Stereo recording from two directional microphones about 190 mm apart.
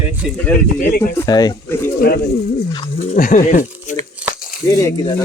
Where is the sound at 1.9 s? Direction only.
50° left (ahead or behind).